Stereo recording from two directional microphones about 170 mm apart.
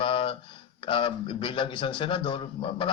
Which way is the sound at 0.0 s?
30° left (ahead or behind).